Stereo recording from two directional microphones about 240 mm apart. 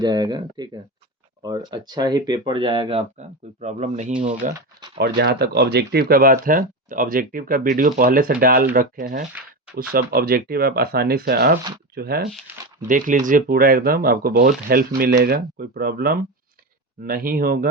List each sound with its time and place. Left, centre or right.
0.0 s speech: centre
4.9 s speech: right